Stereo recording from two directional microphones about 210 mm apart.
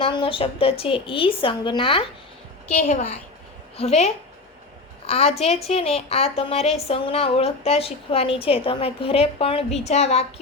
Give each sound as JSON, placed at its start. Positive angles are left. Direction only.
{"t": 0.0, "sound": "a woman's voice", "side_deg": 25}